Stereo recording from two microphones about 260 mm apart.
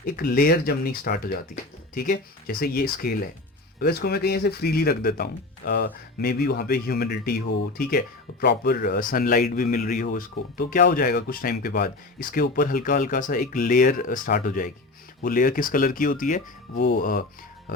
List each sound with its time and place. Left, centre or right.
0.0 s speech: left